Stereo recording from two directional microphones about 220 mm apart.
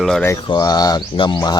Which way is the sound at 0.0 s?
Centre (ahead or behind).